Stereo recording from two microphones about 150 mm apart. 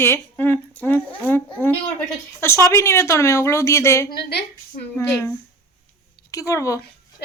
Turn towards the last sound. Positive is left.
turn(degrees=20)  # may be behind; listen again after turning